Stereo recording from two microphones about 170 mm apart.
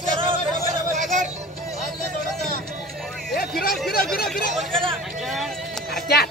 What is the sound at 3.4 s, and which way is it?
Speech, 60° left (ahead or behind).